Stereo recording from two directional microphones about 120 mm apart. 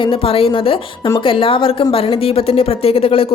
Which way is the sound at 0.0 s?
50° left (ahead or behind).